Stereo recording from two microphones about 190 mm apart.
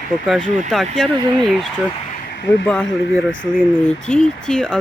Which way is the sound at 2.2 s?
60° left (ahead or behind).